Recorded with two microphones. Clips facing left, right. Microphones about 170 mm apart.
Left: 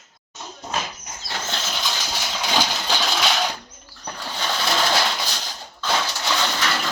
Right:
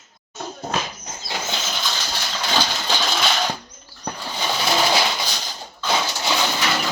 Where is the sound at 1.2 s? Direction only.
15° right (ahead or behind).